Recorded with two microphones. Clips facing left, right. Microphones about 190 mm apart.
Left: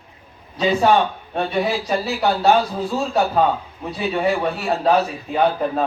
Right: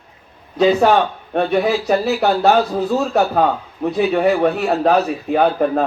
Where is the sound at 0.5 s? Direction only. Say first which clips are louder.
Right 5 dB; 55° right (ahead or behind).